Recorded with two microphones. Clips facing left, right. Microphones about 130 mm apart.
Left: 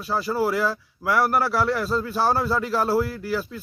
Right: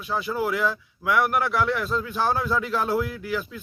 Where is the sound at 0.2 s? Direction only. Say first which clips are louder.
Left 2 dB; 35° left (ahead or behind).